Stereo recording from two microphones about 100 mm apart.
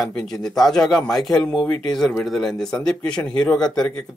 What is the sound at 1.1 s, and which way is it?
Speech, 35° left (ahead or behind).